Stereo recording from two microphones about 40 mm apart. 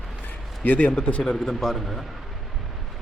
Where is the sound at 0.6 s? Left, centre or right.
Left.